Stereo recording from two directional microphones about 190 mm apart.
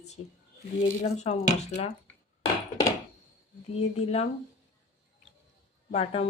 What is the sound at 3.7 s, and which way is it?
Speech, 35° left (ahead or behind).